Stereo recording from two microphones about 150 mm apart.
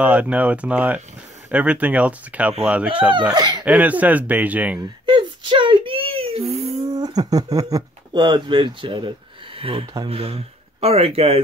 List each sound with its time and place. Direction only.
0.0 s speech: 10° right (ahead or behind)
5.0 s a sound: 30° right (ahead or behind)
6.9 s speech: 25° right (ahead or behind); by 11.4 s 40° right (ahead or behind)